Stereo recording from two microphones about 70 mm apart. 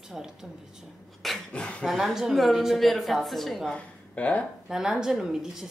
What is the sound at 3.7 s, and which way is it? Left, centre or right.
Speech, left.